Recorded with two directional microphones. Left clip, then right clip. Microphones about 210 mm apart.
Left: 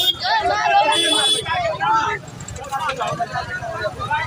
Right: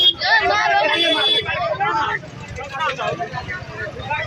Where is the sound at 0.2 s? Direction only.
45° left (ahead or behind).